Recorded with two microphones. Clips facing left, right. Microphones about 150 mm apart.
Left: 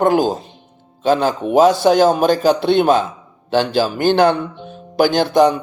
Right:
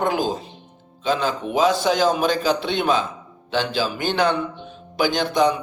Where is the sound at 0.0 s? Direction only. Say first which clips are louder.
Left 7 dB; 50° left (ahead or behind).